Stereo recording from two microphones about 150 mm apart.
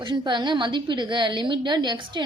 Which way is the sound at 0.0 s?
30° right (ahead or behind).